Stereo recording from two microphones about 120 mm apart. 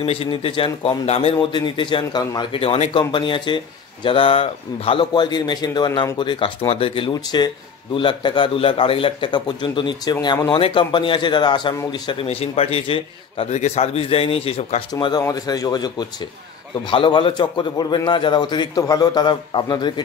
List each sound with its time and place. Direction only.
0.0 s a man's voice: 55° left (ahead or behind)
1.5 s a man's voice: 40° left (ahead or behind)
2.6 s speech: 50° left (ahead or behind)
5.1 s a man's voice: 35° left (ahead or behind)
7.1 s a man's voice: 35° left (ahead or behind)
13.5 s a man's voice: 65° left (ahead or behind)
14.9 s a man's voice: 35° left (ahead or behind)